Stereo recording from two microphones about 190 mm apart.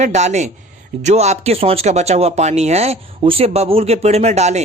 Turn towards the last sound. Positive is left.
turn(degrees=-35)  # may be behind; listen again after turning